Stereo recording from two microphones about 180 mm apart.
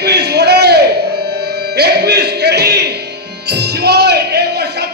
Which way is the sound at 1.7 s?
65° right (ahead or behind).